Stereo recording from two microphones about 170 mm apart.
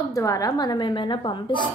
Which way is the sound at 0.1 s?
20° left (ahead or behind).